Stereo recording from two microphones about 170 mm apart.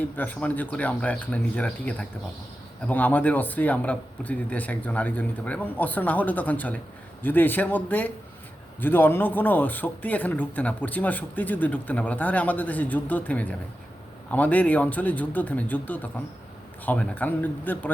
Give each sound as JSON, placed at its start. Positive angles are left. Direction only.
{"t": 0.2, "sound": "speech", "side_deg": 10}